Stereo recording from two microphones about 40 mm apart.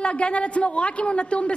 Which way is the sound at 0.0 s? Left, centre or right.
Left.